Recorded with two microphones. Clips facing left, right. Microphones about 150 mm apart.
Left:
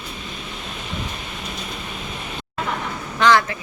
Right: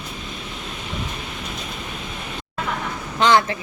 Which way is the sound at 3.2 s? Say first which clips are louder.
Even; 20° right (ahead or behind).